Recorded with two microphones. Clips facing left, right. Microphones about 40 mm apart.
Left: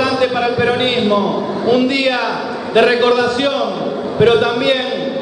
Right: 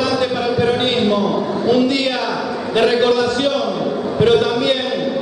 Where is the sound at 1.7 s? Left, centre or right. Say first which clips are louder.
Left 2 dB; centre.